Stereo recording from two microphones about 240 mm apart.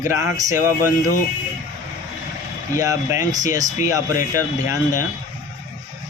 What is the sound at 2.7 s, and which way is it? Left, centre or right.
Speech, centre.